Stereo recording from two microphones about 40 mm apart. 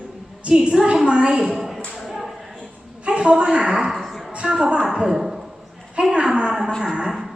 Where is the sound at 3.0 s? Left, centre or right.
Right.